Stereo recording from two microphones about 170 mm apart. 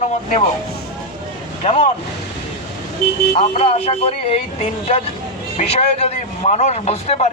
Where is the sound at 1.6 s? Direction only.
40° left (ahead or behind).